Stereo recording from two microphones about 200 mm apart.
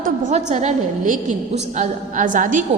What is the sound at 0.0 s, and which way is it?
A woman's voice, 35° right (ahead or behind).